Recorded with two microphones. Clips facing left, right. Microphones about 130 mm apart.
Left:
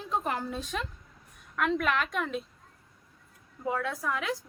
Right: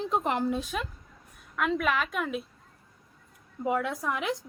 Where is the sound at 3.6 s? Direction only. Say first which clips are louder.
Right 3 dB; 20° right (ahead or behind).